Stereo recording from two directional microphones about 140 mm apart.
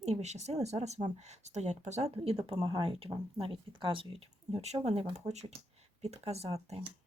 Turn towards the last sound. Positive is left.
turn(degrees=-45)  # may be behind; listen again after turning